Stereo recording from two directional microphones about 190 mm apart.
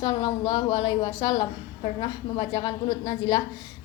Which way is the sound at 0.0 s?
20° left (ahead or behind).